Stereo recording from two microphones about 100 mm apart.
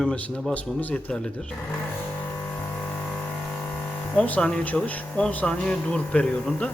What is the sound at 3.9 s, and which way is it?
A man's voice, 10° left (ahead or behind).